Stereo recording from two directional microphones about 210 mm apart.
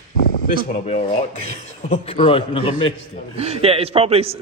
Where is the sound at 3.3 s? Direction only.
30° right (ahead or behind).